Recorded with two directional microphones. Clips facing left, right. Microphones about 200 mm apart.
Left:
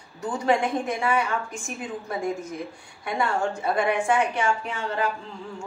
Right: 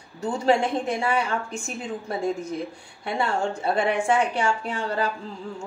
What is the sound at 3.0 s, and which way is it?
A woman's voice, 30° right (ahead or behind).